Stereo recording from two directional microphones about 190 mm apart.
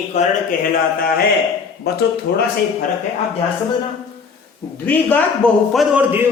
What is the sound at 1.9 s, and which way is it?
Speech, 60° left (ahead or behind).